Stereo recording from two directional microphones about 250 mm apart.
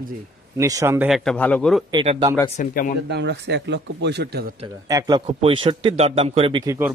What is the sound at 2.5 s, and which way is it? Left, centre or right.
Speech, left.